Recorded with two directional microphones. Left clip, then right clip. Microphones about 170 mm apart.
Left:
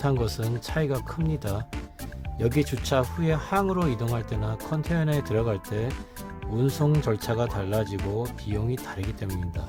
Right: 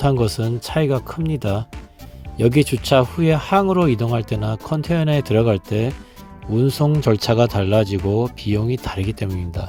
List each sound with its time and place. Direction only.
0.0 s speech: 25° right (ahead or behind)